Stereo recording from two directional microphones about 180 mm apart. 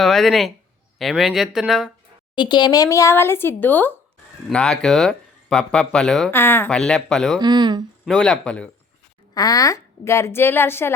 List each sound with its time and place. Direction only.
0.0 s speech: centre (ahead or behind)
2.3 s speech: 25° left (ahead or behind); by 7.3 s 5° left (ahead or behind)
7.3 s speech: 25° right (ahead or behind)
8.0 s speech: 5° left (ahead or behind)
9.3 s speech: 20° left (ahead or behind)